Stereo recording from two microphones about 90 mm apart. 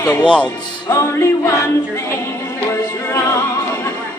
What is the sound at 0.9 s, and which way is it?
Music, 30° left (ahead or behind).